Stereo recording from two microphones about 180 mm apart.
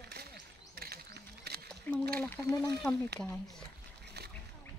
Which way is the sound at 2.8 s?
10° left (ahead or behind).